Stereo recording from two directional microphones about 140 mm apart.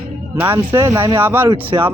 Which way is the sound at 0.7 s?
20° right (ahead or behind).